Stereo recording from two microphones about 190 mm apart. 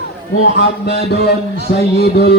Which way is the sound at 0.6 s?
60° left (ahead or behind).